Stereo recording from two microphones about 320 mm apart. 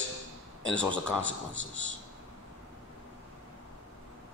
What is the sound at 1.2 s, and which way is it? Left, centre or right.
Speech, right.